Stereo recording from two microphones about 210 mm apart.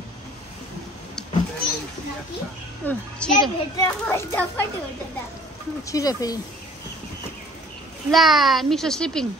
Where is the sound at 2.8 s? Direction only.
10° left (ahead or behind).